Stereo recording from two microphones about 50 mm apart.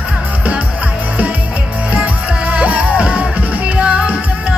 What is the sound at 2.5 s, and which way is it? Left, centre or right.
Music, right.